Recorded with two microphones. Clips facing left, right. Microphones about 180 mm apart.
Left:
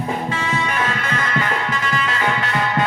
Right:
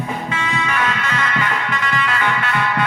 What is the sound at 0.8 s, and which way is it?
Music, 45° left (ahead or behind).